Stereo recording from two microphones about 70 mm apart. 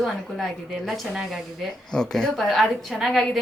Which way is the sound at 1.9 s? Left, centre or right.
Centre.